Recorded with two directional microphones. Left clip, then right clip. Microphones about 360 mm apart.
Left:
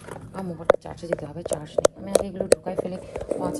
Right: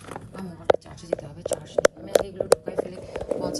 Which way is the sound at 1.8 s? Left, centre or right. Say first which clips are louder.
Even; centre.